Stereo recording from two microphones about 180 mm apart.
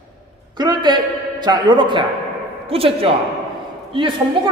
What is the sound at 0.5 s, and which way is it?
A man's voice, 25° right (ahead or behind).